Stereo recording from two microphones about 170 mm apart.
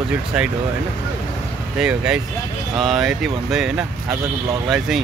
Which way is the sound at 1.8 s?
5° right (ahead or behind).